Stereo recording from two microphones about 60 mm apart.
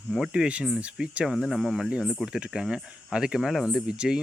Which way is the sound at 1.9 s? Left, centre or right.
Centre.